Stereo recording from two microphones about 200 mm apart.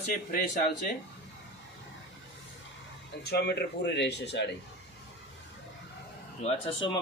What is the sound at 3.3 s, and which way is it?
Speech, 55° left (ahead or behind).